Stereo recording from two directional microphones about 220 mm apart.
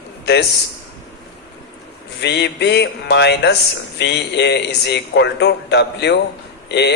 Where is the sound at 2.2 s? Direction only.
50° left (ahead or behind).